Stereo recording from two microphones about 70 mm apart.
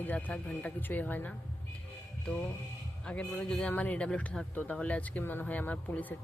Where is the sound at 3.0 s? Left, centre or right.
Centre.